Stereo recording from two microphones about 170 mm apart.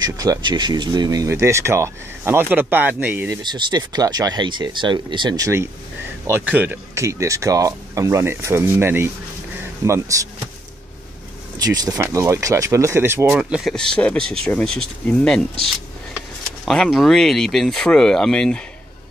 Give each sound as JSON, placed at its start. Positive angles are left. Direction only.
{"t": 0.0, "sound": "speech", "side_deg": -20}
{"t": 3.4, "sound": "speech", "side_deg": -25}
{"t": 11.5, "sound": "speech", "side_deg": -20}
{"t": 13.4, "sound": "speech", "side_deg": 0}
{"t": 16.6, "sound": "speech", "side_deg": 0}